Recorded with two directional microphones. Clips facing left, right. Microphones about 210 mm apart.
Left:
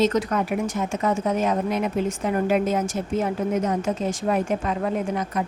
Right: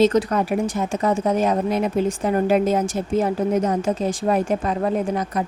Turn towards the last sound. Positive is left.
turn(degrees=-35)  # may be behind; listen again after turning